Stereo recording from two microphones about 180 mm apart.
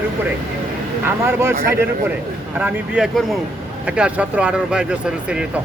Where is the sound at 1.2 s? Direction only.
15° right (ahead or behind).